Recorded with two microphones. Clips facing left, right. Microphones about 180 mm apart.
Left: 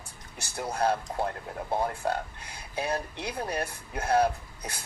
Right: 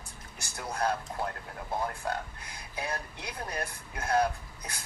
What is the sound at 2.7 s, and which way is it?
Speech, 30° left (ahead or behind).